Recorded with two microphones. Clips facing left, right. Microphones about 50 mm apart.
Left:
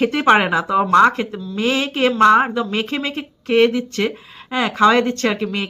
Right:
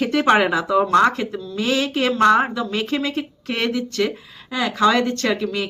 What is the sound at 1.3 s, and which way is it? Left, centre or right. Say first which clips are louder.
Speech: left 1 dB; centre.